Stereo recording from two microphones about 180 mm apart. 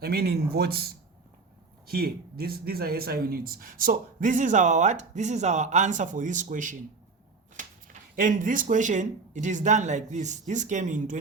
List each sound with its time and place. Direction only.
0.0 s speech: 60° right (ahead or behind); by 6.7 s 45° right (ahead or behind)
8.1 s speech: 50° right (ahead or behind)